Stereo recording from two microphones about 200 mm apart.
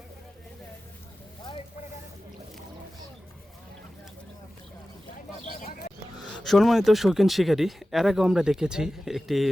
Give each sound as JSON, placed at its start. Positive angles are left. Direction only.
{"t": 5.5, "sound": "bird", "side_deg": 45}
{"t": 6.3, "sound": "speech", "side_deg": 0}